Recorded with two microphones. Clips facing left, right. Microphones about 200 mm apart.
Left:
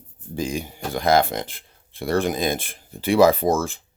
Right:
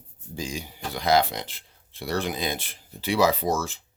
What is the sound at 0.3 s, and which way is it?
Speech, 55° left (ahead or behind).